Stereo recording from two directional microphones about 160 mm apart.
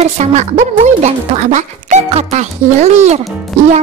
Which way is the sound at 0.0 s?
45° right (ahead or behind).